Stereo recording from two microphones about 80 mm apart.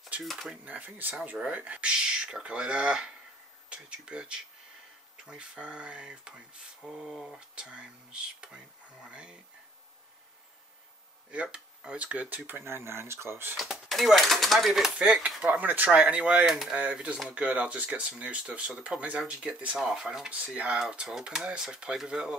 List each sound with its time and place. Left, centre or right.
0.2 s speech: centre
0.7 s speech: right; by 7.3 s centre
7.3 s speech: centre
11.2 s speech: centre; by 13.6 s right
13.6 s speech: centre
14.7 s speech: centre